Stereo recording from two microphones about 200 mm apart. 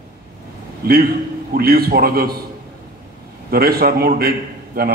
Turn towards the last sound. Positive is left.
turn(degrees=-50)  # may be behind; listen again after turning